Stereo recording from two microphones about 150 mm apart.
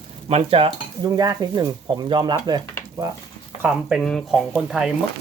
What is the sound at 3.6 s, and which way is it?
Speech, 5° right (ahead or behind).